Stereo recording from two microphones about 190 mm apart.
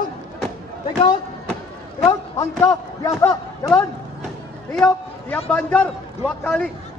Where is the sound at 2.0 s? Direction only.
15° left (ahead or behind).